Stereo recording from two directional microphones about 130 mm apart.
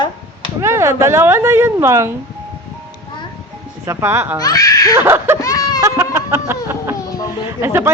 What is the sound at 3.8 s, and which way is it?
Speech, 20° right (ahead or behind).